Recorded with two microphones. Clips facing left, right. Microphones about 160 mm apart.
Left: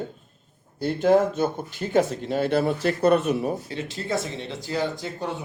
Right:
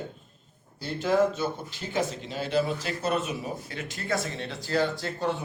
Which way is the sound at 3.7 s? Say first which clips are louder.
Left 3 dB; 30° left (ahead or behind).